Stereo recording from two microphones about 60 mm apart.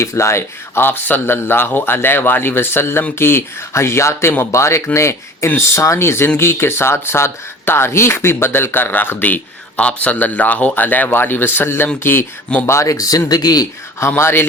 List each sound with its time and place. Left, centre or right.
0.0 s speech: left
12.6 s speech: left
14.2 s speech: left